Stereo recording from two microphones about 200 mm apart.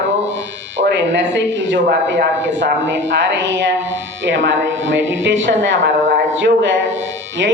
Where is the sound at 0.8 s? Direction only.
65° right (ahead or behind).